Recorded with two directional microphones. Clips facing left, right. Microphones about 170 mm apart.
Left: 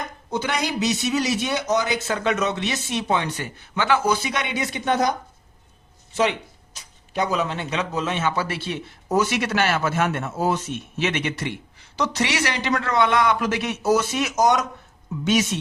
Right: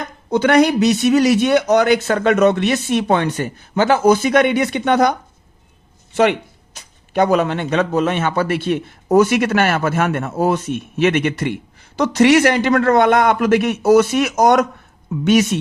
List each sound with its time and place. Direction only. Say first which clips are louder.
0.3 s speech: right 13 dB; 65° right (ahead or behind)
6.7 s speech: right 8 dB; 60° right (ahead or behind)